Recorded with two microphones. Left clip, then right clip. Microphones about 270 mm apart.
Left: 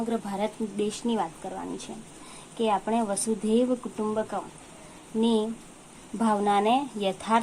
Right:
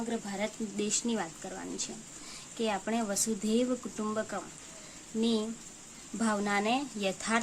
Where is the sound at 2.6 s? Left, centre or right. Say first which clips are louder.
Left 7 dB; right.